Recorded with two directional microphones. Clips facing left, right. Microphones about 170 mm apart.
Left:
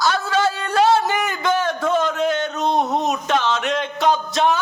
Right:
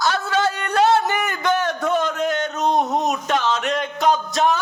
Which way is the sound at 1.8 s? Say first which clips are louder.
Left 1 dB; 40° right (ahead or behind).